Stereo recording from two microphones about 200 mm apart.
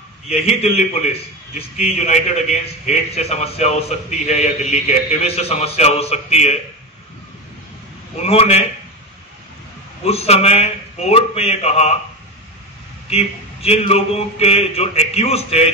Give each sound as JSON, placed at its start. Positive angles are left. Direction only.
{"t": 0.3, "sound": "a man's voice", "side_deg": 30}
{"t": 1.9, "sound": "a man's voice", "side_deg": 30}
{"t": 8.2, "sound": "a man's voice", "side_deg": 30}
{"t": 10.0, "sound": "a man's voice", "side_deg": 30}
{"t": 13.1, "sound": "a man's voice", "side_deg": 30}